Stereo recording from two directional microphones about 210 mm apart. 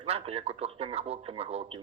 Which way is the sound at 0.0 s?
30° right (ahead or behind).